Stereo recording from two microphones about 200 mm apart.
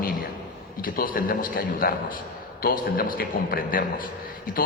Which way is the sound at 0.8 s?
45° left (ahead or behind).